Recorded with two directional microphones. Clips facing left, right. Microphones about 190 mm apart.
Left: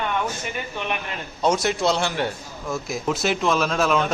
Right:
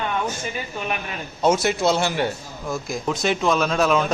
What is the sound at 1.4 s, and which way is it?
A man's voice, 5° right (ahead or behind).